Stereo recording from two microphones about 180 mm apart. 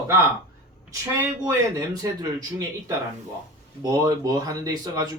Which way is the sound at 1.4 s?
20° right (ahead or behind).